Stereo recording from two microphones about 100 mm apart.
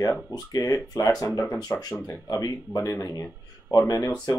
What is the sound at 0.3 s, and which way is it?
Speech, 35° left (ahead or behind).